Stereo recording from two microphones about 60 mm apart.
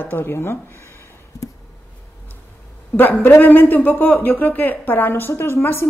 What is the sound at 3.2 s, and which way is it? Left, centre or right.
A woman's voice, left.